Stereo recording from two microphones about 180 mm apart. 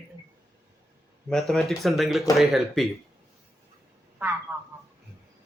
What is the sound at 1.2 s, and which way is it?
Speech, centre (ahead or behind).